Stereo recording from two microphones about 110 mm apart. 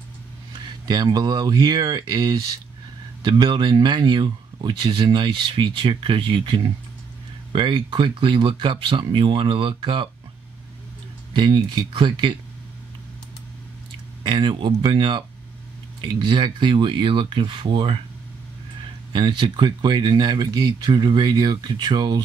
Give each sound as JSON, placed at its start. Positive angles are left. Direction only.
{"t": 0.5, "sound": "speech", "side_deg": -45}
{"t": 11.3, "sound": "speech", "side_deg": -45}
{"t": 14.2, "sound": "speech", "side_deg": -45}
{"t": 19.1, "sound": "speech", "side_deg": -45}